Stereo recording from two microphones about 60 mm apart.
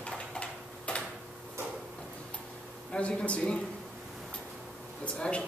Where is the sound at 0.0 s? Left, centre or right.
Centre.